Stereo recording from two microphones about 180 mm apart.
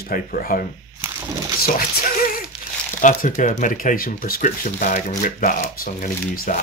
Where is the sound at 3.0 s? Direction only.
45° left (ahead or behind).